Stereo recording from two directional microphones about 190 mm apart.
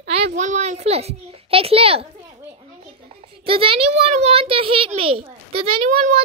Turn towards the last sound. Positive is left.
turn(degrees=-45)  # may be behind; listen again after turning